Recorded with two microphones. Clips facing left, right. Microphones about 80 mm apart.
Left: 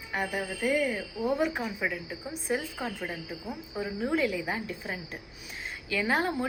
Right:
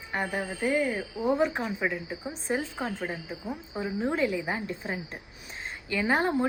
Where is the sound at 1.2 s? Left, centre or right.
Centre.